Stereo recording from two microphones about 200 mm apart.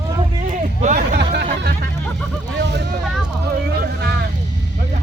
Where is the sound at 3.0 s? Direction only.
Centre (ahead or behind).